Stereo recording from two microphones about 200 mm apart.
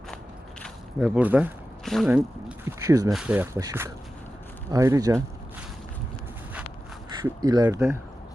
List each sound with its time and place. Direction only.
0.9 s speech: 5° right (ahead or behind)
2.6 s speech: 15° right (ahead or behind)
3.1 s speech: 5° right (ahead or behind)
7.3 s speech: 20° right (ahead or behind)